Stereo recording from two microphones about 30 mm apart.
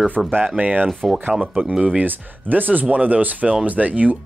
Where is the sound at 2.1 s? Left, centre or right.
Right.